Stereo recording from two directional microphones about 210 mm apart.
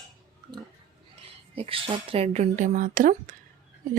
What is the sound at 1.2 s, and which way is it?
A woman's voice, 25° right (ahead or behind).